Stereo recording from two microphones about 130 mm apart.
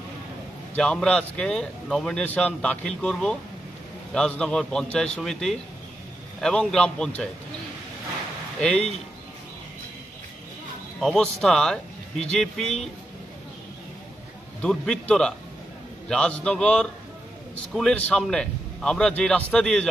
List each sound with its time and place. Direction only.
0.7 s a man's voice: 5° left (ahead or behind)
8.5 s speech: 5° left (ahead or behind)
11.0 s speech: centre (ahead or behind)
14.6 s a man's voice: 5° left (ahead or behind)